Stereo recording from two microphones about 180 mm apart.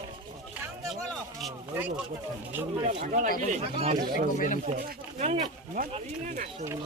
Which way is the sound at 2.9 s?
40° right (ahead or behind).